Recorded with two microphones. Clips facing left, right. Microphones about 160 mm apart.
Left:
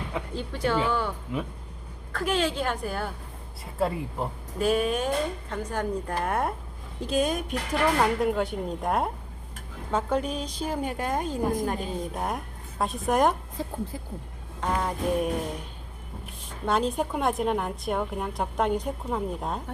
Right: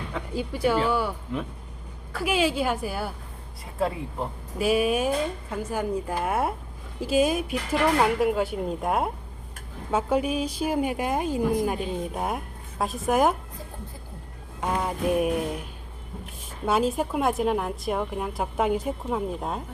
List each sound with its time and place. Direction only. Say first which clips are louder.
0.3 s speech: right 3 dB; 10° right (ahead or behind)
2.1 s a woman's voice: right 2 dB; 10° right (ahead or behind)
13.6 s speech: left 8 dB; 90° left
14.6 s music: right 1 dB; 10° right (ahead or behind)
16.6 s a woman's voice: right 2 dB; 5° right (ahead or behind)